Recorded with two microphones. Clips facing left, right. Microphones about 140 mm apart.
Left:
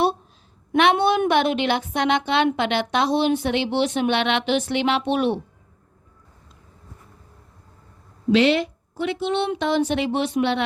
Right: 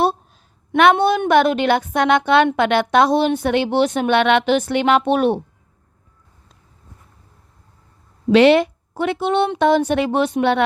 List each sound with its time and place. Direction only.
0.8 s speech: 45° right (ahead or behind)
8.3 s a woman's voice: 65° right (ahead or behind); by 10.6 s 50° right (ahead or behind)